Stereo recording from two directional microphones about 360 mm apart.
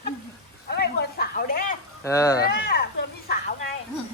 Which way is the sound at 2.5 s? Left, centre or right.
Left.